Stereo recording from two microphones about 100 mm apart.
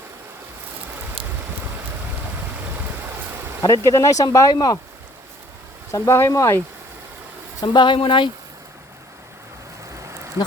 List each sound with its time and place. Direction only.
3.6 s speech: 30° left (ahead or behind)
5.9 s speech: 25° left (ahead or behind)
7.6 s speech: 50° left (ahead or behind)
9.9 s a sound: 30° right (ahead or behind)